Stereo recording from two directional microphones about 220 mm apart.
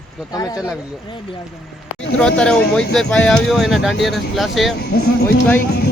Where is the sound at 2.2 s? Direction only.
5° left (ahead or behind).